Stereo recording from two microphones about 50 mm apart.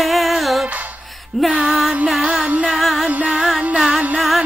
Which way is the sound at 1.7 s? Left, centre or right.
Centre.